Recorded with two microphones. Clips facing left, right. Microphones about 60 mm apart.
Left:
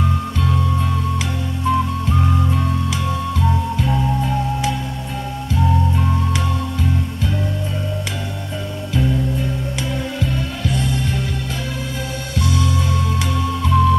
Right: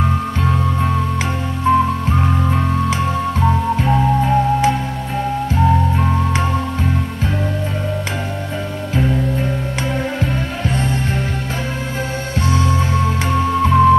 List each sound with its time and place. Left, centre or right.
1.7 s music: right
8.9 s music: right
12.4 s music: right